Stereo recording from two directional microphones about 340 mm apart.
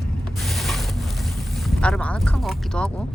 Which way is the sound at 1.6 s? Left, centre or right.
Centre.